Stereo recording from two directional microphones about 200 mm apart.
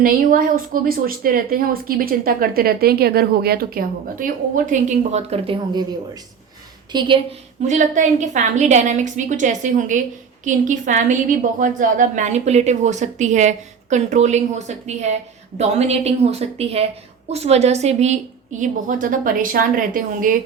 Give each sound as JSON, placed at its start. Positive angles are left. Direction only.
{"t": 0.0, "sound": "a woman's voice", "side_deg": -45}
{"t": 6.9, "sound": "a woman's voice", "side_deg": -20}
{"t": 7.6, "sound": "a woman's voice", "side_deg": -40}